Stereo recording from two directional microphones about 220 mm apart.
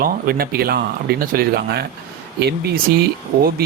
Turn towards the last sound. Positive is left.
turn(degrees=-40)  # may be behind; listen again after turning